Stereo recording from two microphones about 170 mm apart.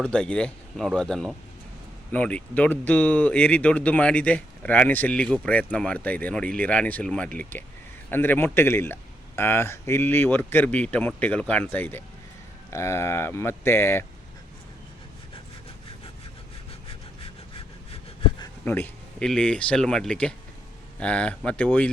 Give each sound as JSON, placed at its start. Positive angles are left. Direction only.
{"t": 0.0, "sound": "speech", "side_deg": 5}
{"t": 18.6, "sound": "speech", "side_deg": 10}